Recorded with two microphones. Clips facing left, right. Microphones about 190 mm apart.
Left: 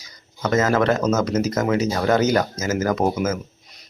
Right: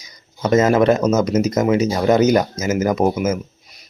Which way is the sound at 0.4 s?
20° right (ahead or behind).